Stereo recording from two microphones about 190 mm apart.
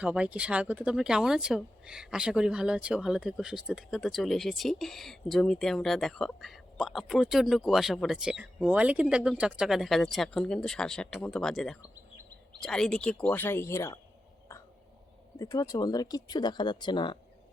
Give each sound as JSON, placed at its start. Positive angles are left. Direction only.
{"t": 0.0, "sound": "speech", "side_deg": -5}
{"t": 15.4, "sound": "speech", "side_deg": 15}